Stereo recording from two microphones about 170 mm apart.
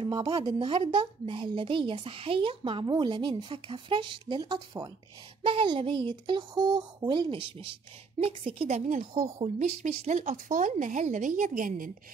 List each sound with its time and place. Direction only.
0.0 s a woman's voice: 30° right (ahead or behind); by 11.9 s 50° right (ahead or behind)